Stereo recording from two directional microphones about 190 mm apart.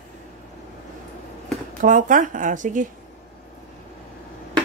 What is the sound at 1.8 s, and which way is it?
Speech, 45° right (ahead or behind).